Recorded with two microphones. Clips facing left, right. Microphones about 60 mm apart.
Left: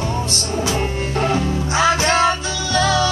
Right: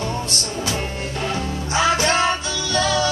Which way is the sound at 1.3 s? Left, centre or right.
Left.